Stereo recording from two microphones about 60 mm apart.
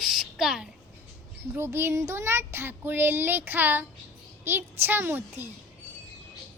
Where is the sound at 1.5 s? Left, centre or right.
Right.